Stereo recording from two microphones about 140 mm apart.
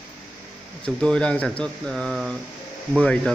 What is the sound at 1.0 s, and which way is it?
A man's voice, 5° left (ahead or behind).